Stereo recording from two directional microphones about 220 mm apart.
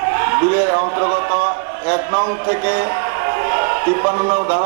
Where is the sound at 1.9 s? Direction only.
20° right (ahead or behind).